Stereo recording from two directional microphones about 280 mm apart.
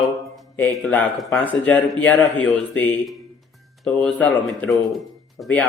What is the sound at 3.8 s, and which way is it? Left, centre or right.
A man's voice, centre.